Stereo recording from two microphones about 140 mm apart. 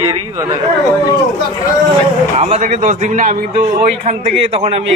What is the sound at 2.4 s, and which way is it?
A man's voice, 60° right (ahead or behind).